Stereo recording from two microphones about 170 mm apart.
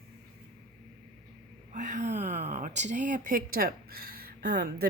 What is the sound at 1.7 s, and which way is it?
Speech, 45° right (ahead or behind).